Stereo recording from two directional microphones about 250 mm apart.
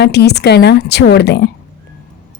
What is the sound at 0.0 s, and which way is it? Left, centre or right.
Speech, left.